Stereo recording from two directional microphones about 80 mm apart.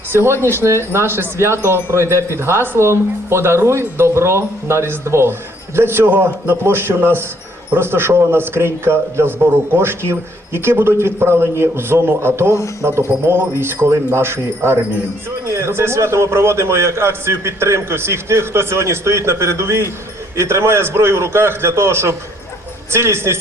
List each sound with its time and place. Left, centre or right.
0.1 s a man's voice: right